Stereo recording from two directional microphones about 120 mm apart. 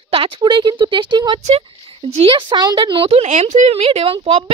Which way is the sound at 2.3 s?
40° right (ahead or behind).